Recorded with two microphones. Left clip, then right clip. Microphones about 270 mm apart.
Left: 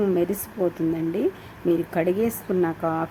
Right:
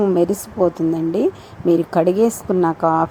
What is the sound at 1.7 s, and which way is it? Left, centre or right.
Speech, centre.